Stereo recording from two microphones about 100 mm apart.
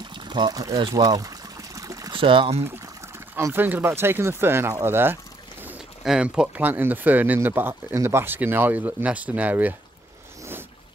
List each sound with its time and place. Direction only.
0.1 s pour: 50° right (ahead or behind); by 2.1 s 35° right (ahead or behind)
2.1 s speech: 60° right (ahead or behind)
3.3 s speech: 20° right (ahead or behind)
4.8 s pour: 20° right (ahead or behind)
6.0 s speech: 10° right (ahead or behind)